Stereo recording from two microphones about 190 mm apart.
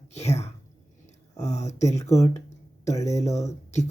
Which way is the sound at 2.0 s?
15° left (ahead or behind).